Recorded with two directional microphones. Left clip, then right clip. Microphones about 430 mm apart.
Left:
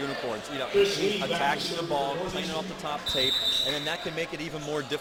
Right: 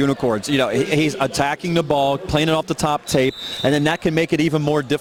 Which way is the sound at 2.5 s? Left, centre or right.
Right.